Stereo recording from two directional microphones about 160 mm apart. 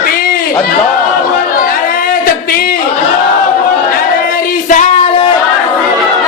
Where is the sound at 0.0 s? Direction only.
65° left (ahead or behind).